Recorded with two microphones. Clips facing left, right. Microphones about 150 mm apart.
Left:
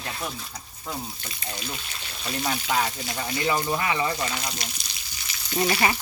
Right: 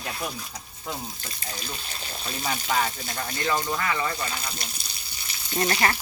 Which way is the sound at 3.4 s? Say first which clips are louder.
Left 1 dB; 20° left (ahead or behind).